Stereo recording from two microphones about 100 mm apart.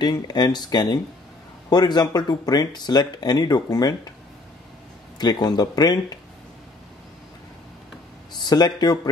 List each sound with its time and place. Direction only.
0.0 s speech: 45° left (ahead or behind)
5.2 s speech: 45° left (ahead or behind)
8.4 s speech: 45° left (ahead or behind)